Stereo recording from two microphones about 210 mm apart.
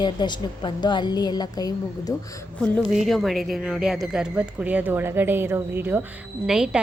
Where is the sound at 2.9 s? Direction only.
Centre (ahead or behind).